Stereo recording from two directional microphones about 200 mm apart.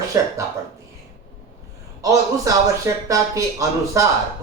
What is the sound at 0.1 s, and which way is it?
Speech, 15° right (ahead or behind).